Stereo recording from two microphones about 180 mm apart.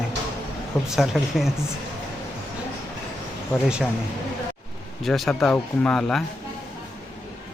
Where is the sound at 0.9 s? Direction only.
Centre (ahead or behind).